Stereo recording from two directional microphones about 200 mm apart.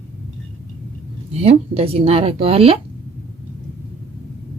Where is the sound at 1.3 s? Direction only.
30° right (ahead or behind).